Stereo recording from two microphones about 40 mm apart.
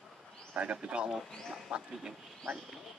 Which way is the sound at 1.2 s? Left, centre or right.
Centre.